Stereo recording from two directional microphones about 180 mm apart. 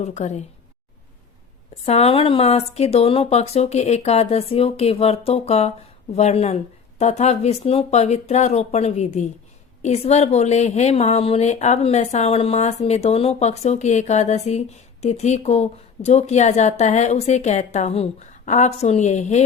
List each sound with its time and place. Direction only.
0.0 s speech: 40° left (ahead or behind)
1.7 s speech: 35° left (ahead or behind)